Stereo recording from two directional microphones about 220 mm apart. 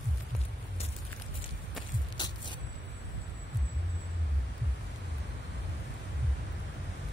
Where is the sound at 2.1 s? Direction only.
20° left (ahead or behind).